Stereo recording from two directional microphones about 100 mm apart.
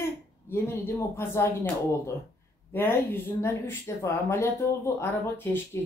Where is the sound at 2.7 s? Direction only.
20° left (ahead or behind).